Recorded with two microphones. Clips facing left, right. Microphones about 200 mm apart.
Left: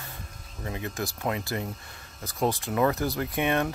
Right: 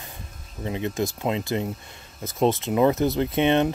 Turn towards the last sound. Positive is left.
turn(degrees=-25)  # may be behind; listen again after turning